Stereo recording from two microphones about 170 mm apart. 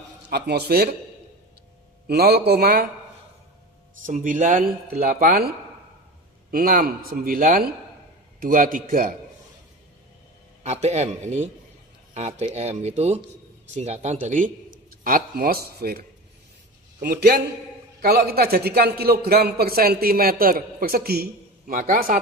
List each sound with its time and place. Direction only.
0.3 s speech: 70° right (ahead or behind)
2.0 s speech: 70° right (ahead or behind)
4.0 s speech: 50° right (ahead or behind)
6.5 s a man's voice: 60° right (ahead or behind)
10.6 s a man's voice: 40° right (ahead or behind)